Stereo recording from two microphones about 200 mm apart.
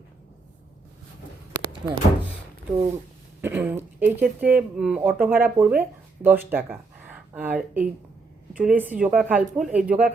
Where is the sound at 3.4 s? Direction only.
10° right (ahead or behind).